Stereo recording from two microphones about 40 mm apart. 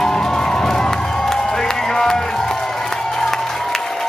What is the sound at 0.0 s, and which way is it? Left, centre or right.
Music, centre.